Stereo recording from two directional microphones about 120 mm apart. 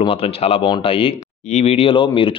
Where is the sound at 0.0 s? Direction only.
50° left (ahead or behind).